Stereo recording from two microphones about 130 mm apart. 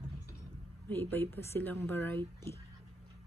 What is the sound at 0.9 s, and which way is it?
Speech, 15° left (ahead or behind).